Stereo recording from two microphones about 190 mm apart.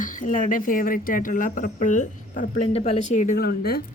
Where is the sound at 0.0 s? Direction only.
45° left (ahead or behind).